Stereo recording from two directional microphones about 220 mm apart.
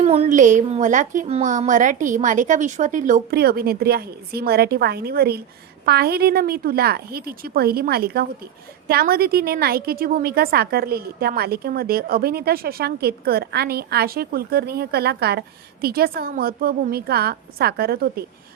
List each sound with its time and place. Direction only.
0.0 s a woman's voice: 30° right (ahead or behind); by 18.3 s 45° right (ahead or behind)